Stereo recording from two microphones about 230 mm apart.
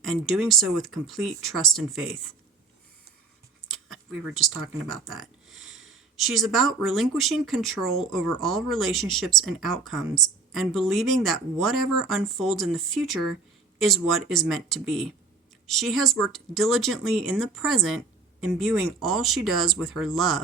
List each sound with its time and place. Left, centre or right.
0.0 s speech: centre
3.7 s a sound: centre
4.9 s speech: centre